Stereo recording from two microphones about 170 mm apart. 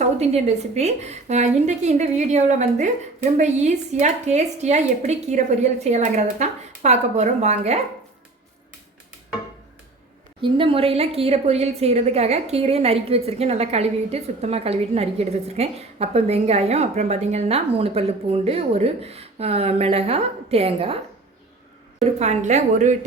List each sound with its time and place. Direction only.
0.0 s a woman's voice: 40° right (ahead or behind)
10.4 s a woman's voice: 30° right (ahead or behind)
22.0 s a woman's voice: 40° right (ahead or behind)